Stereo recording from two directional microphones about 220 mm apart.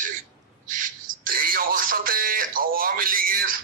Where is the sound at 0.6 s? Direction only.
35° right (ahead or behind).